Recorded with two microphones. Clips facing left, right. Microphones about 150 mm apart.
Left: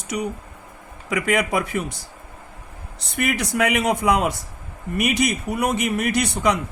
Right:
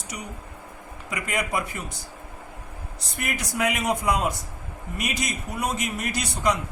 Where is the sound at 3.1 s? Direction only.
70° left (ahead or behind).